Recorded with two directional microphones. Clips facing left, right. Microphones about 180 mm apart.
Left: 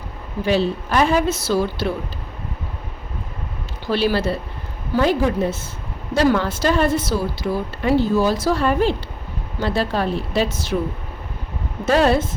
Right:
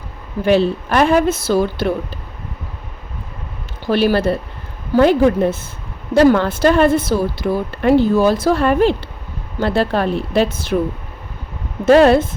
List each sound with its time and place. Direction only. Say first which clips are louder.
0.4 s speech: right 5 dB; 55° right (ahead or behind)
3.8 s speech: right 5 dB; 50° right (ahead or behind)
11.9 s speech: right 7 dB; 60° right (ahead or behind)